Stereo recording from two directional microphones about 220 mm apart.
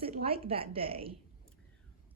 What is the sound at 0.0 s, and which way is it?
A woman's voice, 25° right (ahead or behind).